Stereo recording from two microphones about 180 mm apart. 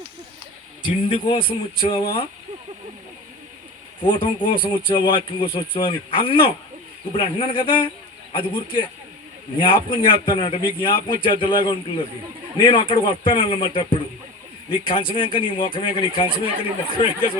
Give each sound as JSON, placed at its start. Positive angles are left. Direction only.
{"t": 0.8, "sound": "a man's voice", "side_deg": 30}
{"t": 4.0, "sound": "a man's voice", "side_deg": 30}